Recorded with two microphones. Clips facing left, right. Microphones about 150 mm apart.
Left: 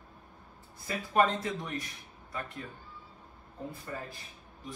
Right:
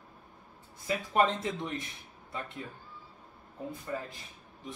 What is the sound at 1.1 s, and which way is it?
Speech, 20° right (ahead or behind).